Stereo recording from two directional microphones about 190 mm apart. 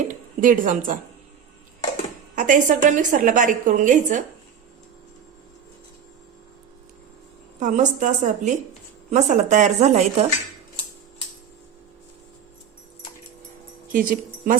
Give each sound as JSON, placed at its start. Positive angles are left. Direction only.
{"t": 0.1, "sound": "a woman's voice", "side_deg": -45}
{"t": 2.3, "sound": "a woman's voice", "side_deg": -45}
{"t": 7.6, "sound": "a woman's voice", "side_deg": -40}
{"t": 13.9, "sound": "speech", "side_deg": -45}